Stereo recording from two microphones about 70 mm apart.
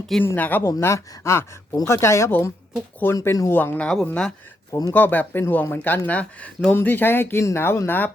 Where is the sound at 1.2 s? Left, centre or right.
Left.